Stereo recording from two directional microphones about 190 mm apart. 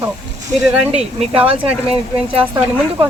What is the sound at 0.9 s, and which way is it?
Speech, 35° right (ahead or behind).